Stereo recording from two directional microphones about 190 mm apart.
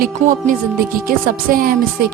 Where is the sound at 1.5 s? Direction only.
50° right (ahead or behind).